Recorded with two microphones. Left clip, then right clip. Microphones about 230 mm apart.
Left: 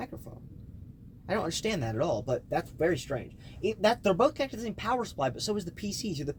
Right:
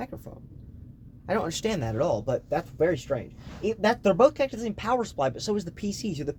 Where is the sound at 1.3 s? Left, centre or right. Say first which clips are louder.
Right 3 dB; right.